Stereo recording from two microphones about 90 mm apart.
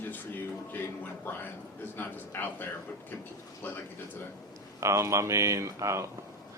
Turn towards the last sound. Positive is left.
turn(degrees=-35)  # may be behind; listen again after turning